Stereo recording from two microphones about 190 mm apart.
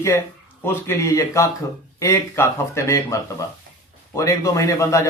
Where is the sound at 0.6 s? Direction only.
15° left (ahead or behind).